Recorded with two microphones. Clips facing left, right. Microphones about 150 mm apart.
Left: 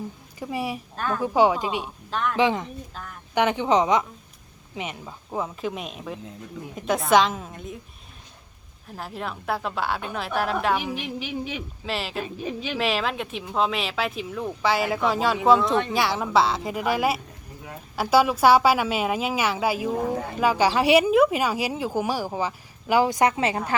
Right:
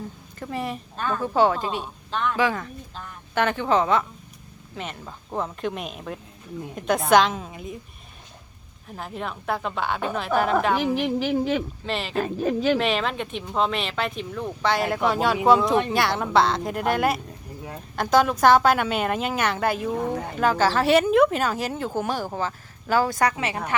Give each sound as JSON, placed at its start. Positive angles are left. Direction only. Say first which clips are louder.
{"t": 0.3, "sound": "speech", "louder": "left 1 dB", "side_deg": 10}
{"t": 2.3, "sound": "speech", "louder": "left 4 dB", "side_deg": 20}
{"t": 8.9, "sound": "speech", "louder": "right 1 dB", "side_deg": 0}
{"t": 12.2, "sound": "speech", "louder": "right 8 dB", "side_deg": -50}
{"t": 12.7, "sound": "speech", "louder": "right 2 dB", "side_deg": 5}